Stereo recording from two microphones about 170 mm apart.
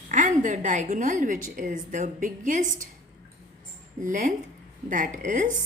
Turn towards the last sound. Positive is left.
turn(degrees=-50)  # may be behind; listen again after turning